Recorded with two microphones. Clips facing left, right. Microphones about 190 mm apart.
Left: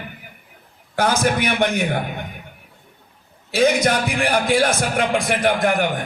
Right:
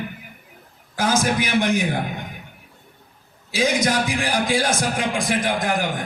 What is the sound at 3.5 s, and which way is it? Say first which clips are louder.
A man's voice: left 3 dB; 60° left (ahead or behind).